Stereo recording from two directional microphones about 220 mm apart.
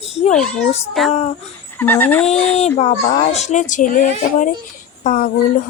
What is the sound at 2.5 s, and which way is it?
Speech, 30° left (ahead or behind).